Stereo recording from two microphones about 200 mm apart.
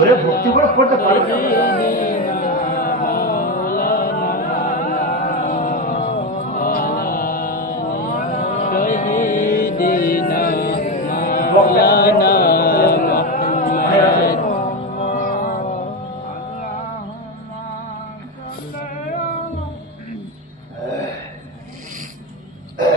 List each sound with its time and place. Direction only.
0.3 s a man's voice: 45° left (ahead or behind)
0.9 s music: 45° left (ahead or behind)